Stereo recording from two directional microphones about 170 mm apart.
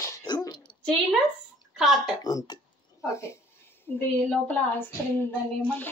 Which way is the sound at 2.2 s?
20° left (ahead or behind).